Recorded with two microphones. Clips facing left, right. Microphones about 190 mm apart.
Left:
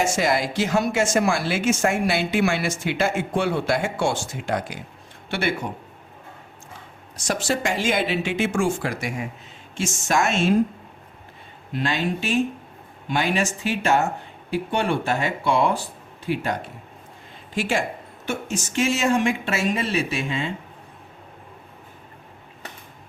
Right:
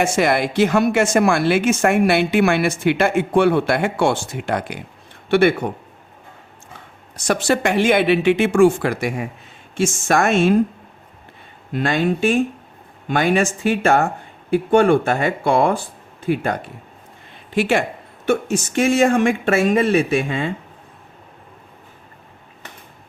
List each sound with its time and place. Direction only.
0.0 s speech: 60° right (ahead or behind)
7.3 s speech: 65° right (ahead or behind)
11.7 s speech: 50° right (ahead or behind)
17.5 s speech: 65° right (ahead or behind)